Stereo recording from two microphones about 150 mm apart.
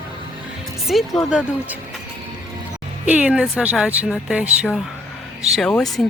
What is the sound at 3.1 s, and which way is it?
Speech, 10° right (ahead or behind).